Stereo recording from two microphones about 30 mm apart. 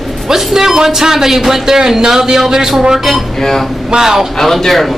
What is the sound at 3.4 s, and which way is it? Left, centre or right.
Speech, centre.